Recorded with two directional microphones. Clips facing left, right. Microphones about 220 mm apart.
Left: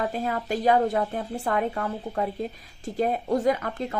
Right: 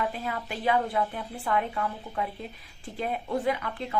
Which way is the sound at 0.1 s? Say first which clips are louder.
Left 6 dB; 45° left (ahead or behind).